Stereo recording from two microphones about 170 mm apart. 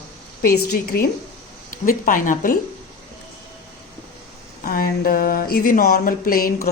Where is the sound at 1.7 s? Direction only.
50° left (ahead or behind).